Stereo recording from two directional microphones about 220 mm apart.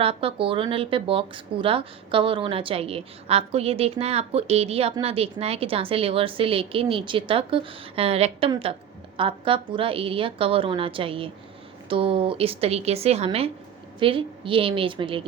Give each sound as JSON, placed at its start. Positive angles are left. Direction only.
{"t": 0.0, "sound": "a woman's voice", "side_deg": -25}